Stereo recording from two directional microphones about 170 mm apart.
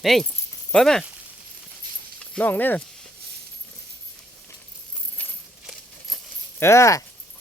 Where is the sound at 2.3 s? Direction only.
10° left (ahead or behind).